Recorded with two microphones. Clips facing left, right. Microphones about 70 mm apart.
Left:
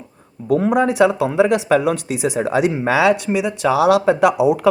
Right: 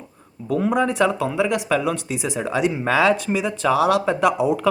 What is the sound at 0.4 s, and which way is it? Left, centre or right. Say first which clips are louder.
Speech: left 5 dB; left.